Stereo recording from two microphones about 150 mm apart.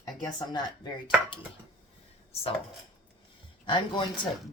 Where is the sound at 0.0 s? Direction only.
25° left (ahead or behind).